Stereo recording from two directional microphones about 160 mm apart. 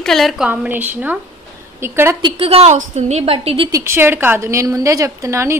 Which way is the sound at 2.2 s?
35° right (ahead or behind).